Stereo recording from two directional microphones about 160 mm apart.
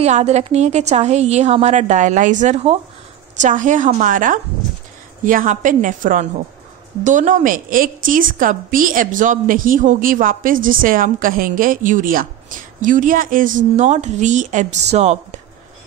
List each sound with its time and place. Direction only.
0.0 s a woman's voice: 45° right (ahead or behind)
3.3 s a woman's voice: 50° right (ahead or behind)